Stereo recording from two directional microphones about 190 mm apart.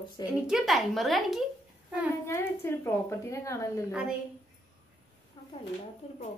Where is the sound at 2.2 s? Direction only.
15° left (ahead or behind).